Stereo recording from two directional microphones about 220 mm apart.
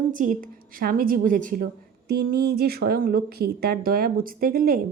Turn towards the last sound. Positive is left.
turn(degrees=-40)  # may be behind; listen again after turning